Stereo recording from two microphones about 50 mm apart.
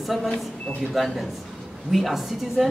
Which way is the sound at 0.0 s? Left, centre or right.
Centre.